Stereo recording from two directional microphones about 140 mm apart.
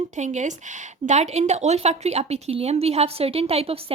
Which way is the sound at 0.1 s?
60° right (ahead or behind).